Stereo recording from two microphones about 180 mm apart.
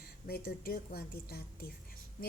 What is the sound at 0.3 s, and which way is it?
A woman's voice, 55° left (ahead or behind).